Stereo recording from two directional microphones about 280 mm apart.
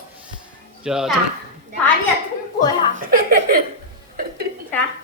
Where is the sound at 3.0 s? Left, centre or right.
Right.